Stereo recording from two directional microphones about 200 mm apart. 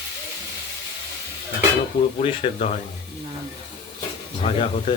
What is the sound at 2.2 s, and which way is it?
Speech, 30° left (ahead or behind).